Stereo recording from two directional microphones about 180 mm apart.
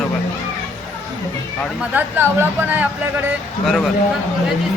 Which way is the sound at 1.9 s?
10° right (ahead or behind).